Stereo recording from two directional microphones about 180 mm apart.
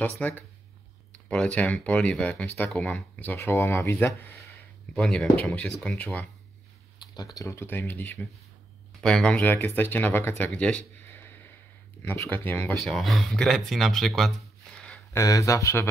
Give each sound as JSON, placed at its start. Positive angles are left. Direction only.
{"t": 0.0, "sound": "speech", "side_deg": 10}
{"t": 7.0, "sound": "a sound", "side_deg": 25}
{"t": 7.3, "sound": "speech", "side_deg": 15}
{"t": 15.1, "sound": "speech", "side_deg": 20}